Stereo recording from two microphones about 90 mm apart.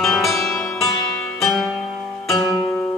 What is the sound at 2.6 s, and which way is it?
Music, 20° left (ahead or behind).